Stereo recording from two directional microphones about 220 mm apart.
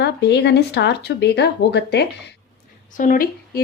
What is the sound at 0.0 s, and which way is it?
Speech, 50° left (ahead or behind).